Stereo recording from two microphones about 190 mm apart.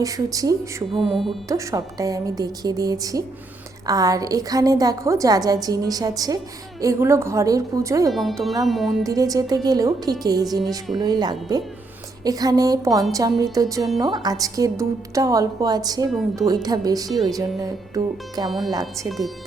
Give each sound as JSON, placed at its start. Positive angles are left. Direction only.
{"t": 0.0, "sound": "a woman's voice", "side_deg": -20}
{"t": 1.1, "sound": "speech", "side_deg": 0}
{"t": 1.5, "sound": "a woman's voice", "side_deg": -15}
{"t": 8.1, "sound": "speech", "side_deg": 0}
{"t": 9.0, "sound": "a woman's voice", "side_deg": -20}
{"t": 19.0, "sound": "speech", "side_deg": 0}